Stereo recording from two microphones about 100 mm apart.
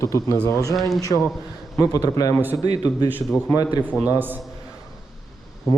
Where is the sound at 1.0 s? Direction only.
35° left (ahead or behind).